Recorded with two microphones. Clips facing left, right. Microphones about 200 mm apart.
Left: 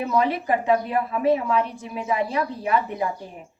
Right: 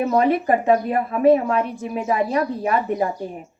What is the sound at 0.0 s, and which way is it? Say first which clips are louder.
A woman's voice: right 5 dB; 55° right (ahead or behind).